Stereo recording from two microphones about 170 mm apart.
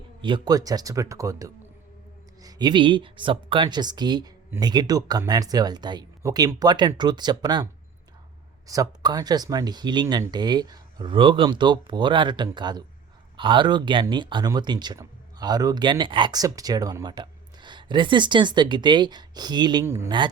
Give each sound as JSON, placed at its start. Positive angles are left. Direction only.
{"t": 0.2, "sound": "speech", "side_deg": -30}
{"t": 20.1, "sound": "speech", "side_deg": -25}